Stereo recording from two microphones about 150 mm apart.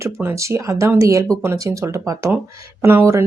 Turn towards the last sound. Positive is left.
turn(degrees=-15)  # may be behind; listen again after turning